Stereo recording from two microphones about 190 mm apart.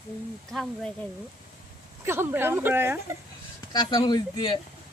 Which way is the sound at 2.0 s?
10° right (ahead or behind).